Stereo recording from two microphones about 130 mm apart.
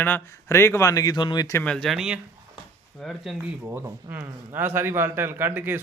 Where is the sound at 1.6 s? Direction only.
5° left (ahead or behind).